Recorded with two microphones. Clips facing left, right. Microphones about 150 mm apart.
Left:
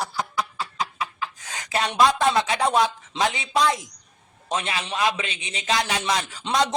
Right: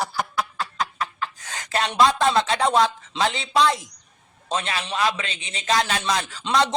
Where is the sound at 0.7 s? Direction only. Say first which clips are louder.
Right 1 dB; 10° left (ahead or behind).